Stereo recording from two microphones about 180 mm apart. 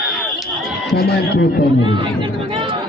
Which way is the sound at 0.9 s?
60° left (ahead or behind).